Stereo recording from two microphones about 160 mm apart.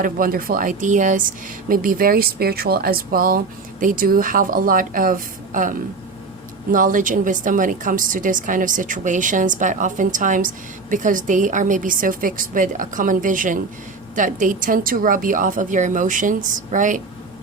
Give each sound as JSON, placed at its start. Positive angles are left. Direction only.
{"t": 0.0, "sound": "a woman's voice", "side_deg": -65}